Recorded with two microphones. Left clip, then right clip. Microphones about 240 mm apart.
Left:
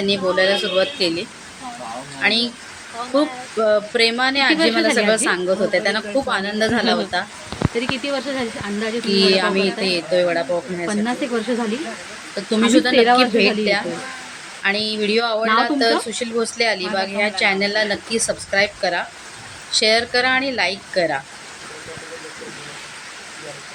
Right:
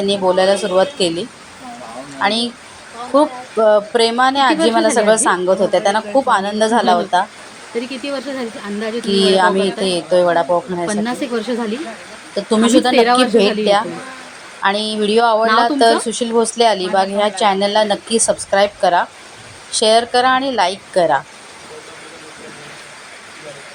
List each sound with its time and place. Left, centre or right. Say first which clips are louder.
0.0 s a woman's voice: right 4 dB; centre
2.2 s a woman's voice: right 1 dB; centre
3.7 s a woman's voice: right 3 dB; centre